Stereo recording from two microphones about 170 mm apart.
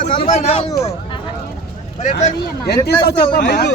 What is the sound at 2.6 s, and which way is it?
A man's voice, 70° left (ahead or behind).